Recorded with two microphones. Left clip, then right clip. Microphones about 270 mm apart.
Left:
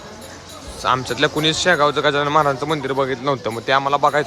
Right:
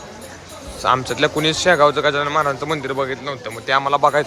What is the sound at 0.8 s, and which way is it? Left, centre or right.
A man's voice, centre.